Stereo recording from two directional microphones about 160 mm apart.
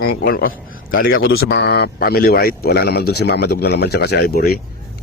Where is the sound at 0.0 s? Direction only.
75° left (ahead or behind).